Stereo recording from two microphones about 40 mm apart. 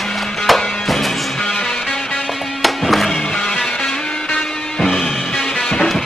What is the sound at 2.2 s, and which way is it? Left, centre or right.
Music, centre.